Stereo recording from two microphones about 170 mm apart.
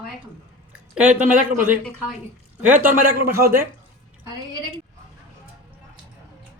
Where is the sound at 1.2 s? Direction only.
50° right (ahead or behind).